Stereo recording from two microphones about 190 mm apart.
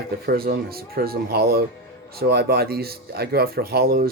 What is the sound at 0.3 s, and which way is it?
Speech, 50° right (ahead or behind).